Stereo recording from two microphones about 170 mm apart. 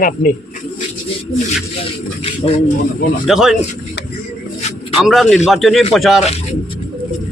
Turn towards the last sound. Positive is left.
turn(degrees=0)  # may be behind; listen again after turning